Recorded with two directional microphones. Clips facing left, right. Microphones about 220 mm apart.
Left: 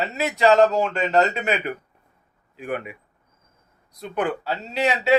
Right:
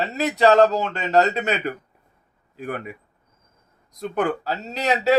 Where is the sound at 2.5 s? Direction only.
40° right (ahead or behind).